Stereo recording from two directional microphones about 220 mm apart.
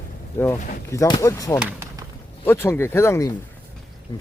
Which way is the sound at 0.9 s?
15° left (ahead or behind).